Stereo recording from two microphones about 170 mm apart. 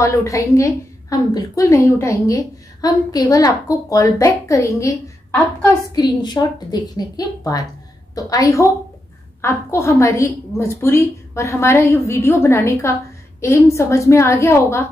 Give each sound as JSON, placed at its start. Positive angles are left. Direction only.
{"t": 0.0, "sound": "a woman's voice", "side_deg": 20}
{"t": 5.9, "sound": "a woman's voice", "side_deg": 25}